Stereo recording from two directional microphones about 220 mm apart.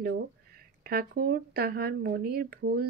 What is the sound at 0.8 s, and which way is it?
Speech, 40° right (ahead or behind).